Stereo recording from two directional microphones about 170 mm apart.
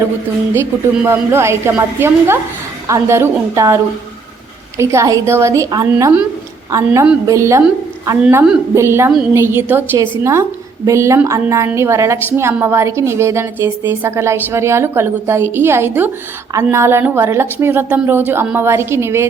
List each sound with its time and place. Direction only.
0.5 s a woman's voice: 15° right (ahead or behind)
4.8 s a woman's voice: 15° right (ahead or behind)